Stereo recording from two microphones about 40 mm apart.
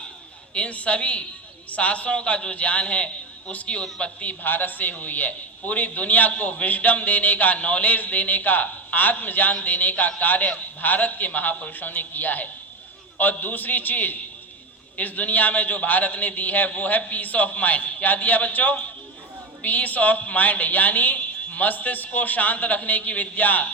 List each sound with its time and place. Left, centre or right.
0.5 s a man's voice: left
4.4 s a man's voice: left